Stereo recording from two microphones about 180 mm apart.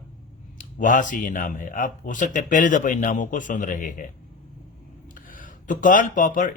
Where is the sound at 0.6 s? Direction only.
45° left (ahead or behind).